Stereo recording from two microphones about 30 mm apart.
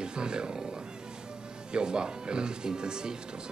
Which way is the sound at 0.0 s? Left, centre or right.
Right.